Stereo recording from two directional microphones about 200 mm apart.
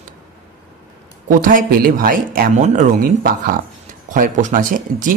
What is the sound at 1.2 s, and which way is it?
Speech, 45° right (ahead or behind).